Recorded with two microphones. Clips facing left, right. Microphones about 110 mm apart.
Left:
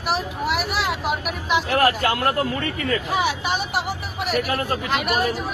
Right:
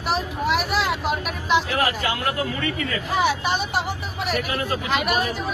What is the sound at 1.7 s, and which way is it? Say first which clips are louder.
Speech: left 4 dB; 55° left (ahead or behind).